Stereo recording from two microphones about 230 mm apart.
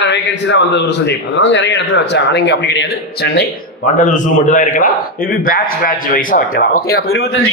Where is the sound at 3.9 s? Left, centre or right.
Left.